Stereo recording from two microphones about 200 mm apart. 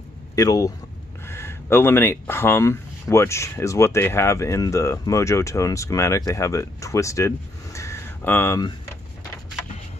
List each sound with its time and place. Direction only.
0.4 s speech: 15° left (ahead or behind)